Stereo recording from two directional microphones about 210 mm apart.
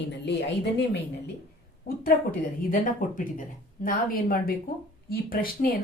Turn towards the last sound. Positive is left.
turn(degrees=45)  # may be behind; listen again after turning